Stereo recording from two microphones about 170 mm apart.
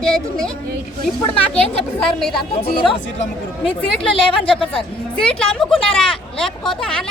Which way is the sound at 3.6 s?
5° left (ahead or behind).